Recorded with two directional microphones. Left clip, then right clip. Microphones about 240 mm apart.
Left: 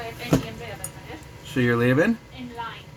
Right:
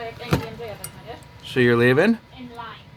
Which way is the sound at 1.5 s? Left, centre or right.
Right.